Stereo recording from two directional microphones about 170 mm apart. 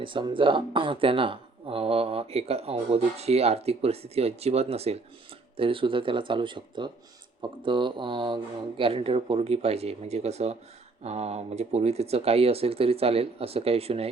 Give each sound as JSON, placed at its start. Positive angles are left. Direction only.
{"t": 0.0, "sound": "speech", "side_deg": -30}